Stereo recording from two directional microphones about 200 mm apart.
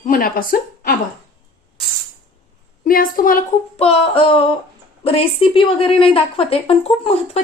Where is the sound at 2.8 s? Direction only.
45° left (ahead or behind).